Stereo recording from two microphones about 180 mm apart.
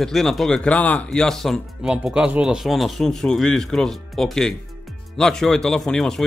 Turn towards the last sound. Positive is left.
turn(degrees=5)  # may be behind; listen again after turning